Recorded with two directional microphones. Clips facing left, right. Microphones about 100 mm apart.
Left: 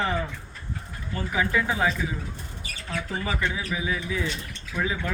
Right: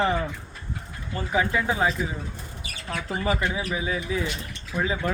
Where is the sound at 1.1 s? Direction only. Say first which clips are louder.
Right 1 dB; 30° right (ahead or behind).